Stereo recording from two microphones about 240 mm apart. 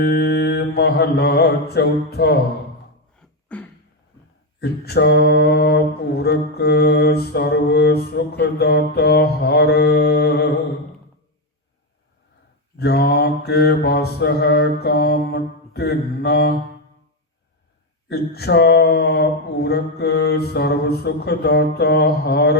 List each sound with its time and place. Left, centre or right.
0.0 s mantra: left
3.2 s beatboxing: centre
4.6 s mantra: left
12.8 s mantra: left
18.1 s mantra: left